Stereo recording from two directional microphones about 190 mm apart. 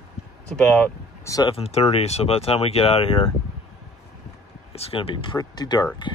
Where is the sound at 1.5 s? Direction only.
35° left (ahead or behind).